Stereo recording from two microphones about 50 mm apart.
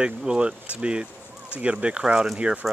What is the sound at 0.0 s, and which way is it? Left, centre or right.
Speech, centre.